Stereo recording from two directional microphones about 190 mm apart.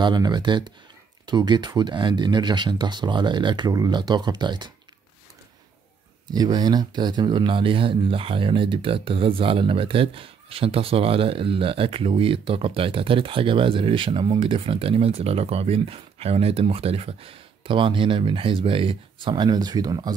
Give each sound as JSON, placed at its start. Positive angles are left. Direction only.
{"t": 0.0, "sound": "speech", "side_deg": -20}
{"t": 6.2, "sound": "speech", "side_deg": -20}